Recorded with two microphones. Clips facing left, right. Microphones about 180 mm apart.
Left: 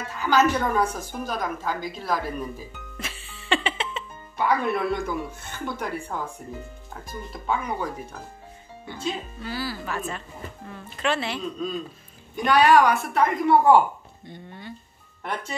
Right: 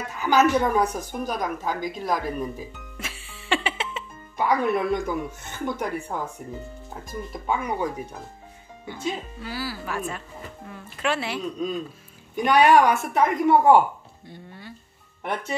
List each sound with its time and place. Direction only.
0.2 s a woman's voice: 15° right (ahead or behind)
3.0 s music: 10° right (ahead or behind)
5.7 s a woman's voice: 15° right (ahead or behind)
7.4 s a woman's voice: 15° right (ahead or behind)
14.2 s speech: 5° right (ahead or behind)